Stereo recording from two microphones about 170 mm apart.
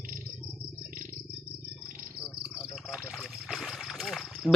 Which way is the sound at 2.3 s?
Centre (ahead or behind).